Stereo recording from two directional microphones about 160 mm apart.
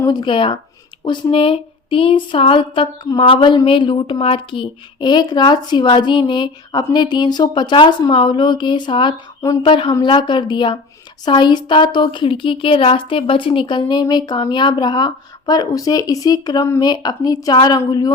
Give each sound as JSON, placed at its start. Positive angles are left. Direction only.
{"t": 0.0, "sound": "speech", "side_deg": 25}